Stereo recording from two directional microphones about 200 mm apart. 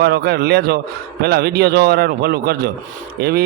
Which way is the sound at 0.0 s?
50° right (ahead or behind).